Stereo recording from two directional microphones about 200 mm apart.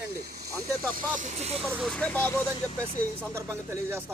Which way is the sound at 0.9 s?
40° right (ahead or behind).